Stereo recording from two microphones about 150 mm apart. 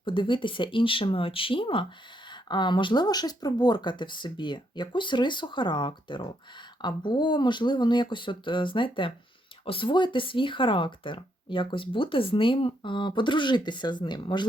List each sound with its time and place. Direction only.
0.0 s speech: 35° left (ahead or behind)